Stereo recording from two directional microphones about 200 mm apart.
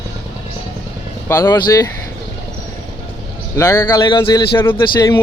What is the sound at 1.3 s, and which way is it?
Speech, 15° left (ahead or behind).